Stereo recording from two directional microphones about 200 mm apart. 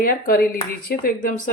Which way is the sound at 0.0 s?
45° left (ahead or behind).